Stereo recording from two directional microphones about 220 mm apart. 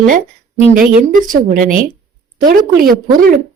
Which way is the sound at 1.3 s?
35° right (ahead or behind).